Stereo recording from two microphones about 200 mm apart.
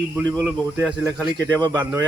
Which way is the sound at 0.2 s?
15° right (ahead or behind).